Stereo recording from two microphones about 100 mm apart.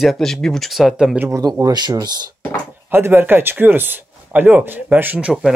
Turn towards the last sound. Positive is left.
turn(degrees=-10)  # may be behind; listen again after turning